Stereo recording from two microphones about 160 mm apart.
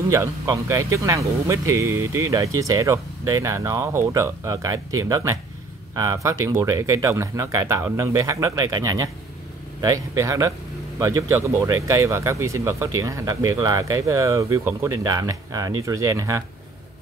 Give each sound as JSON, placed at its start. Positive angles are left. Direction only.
{"t": 0.1, "sound": "speech", "side_deg": -20}